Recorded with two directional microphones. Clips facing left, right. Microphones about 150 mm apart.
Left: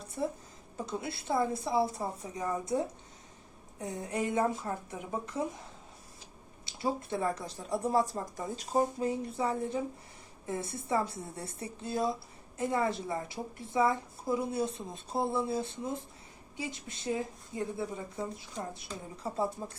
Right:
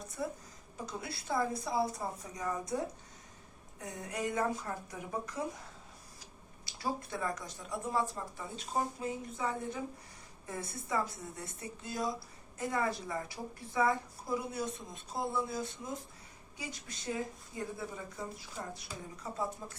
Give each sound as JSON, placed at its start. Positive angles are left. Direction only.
{"t": 0.2, "sound": "a woman's voice", "side_deg": 25}
{"t": 6.7, "sound": "a woman's voice", "side_deg": 25}
{"t": 19.2, "sound": "speech", "side_deg": 30}